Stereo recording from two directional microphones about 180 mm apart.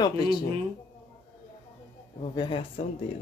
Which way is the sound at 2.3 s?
30° left (ahead or behind).